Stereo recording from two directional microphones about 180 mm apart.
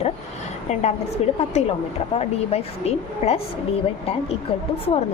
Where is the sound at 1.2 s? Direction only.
35° left (ahead or behind).